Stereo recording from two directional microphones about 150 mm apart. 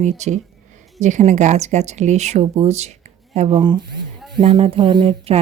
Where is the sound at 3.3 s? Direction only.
40° right (ahead or behind).